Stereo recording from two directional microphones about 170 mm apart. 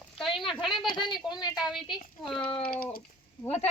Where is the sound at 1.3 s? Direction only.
25° left (ahead or behind).